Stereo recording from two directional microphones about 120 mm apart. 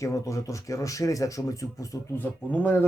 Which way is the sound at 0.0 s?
25° left (ahead or behind).